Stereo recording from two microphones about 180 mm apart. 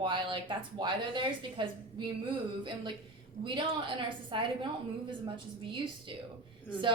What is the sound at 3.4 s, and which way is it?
A woman's voice, 25° right (ahead or behind).